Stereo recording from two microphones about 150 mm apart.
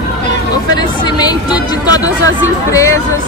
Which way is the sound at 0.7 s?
25° left (ahead or behind).